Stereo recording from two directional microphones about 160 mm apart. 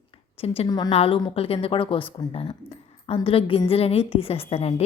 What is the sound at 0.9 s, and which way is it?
A woman's voice, 35° left (ahead or behind).